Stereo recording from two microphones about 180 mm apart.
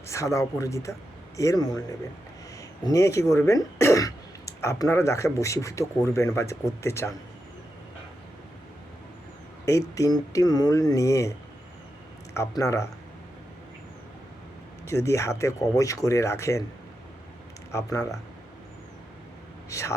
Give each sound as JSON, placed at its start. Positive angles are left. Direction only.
{"t": 0.1, "sound": "speech", "side_deg": 15}
{"t": 9.9, "sound": "speech", "side_deg": 20}
{"t": 12.4, "sound": "speech", "side_deg": 15}
{"t": 14.8, "sound": "speech", "side_deg": 15}
{"t": 17.7, "sound": "speech", "side_deg": 15}
{"t": 19.7, "sound": "speech", "side_deg": 15}